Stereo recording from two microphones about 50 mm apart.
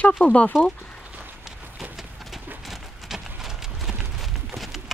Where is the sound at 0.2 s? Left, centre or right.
Left.